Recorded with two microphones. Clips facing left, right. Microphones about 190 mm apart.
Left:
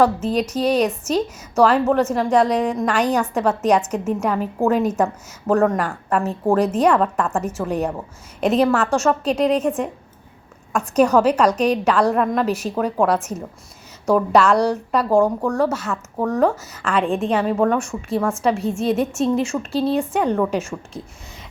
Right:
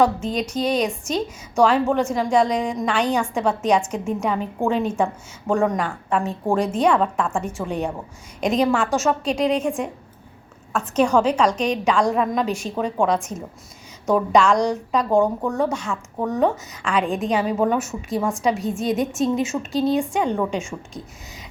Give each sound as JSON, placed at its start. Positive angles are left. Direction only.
{"t": 0.6, "sound": "a woman's voice", "side_deg": 5}
{"t": 18.2, "sound": "a woman's voice", "side_deg": -15}
{"t": 18.4, "sound": "a woman's voice", "side_deg": 0}